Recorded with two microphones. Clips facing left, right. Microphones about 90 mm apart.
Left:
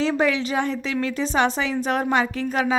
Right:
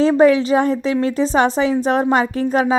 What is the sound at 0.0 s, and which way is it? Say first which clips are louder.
A woman's voice: right 9 dB; 35° right (ahead or behind).